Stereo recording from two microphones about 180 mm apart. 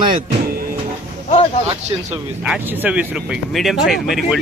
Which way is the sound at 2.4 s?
5° right (ahead or behind).